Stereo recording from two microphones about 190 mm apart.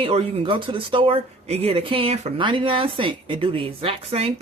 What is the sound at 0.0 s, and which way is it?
A woman's voice, 30° right (ahead or behind).